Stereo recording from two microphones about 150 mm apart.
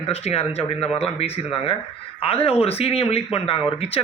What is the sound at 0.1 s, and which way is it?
Speech, 40° left (ahead or behind).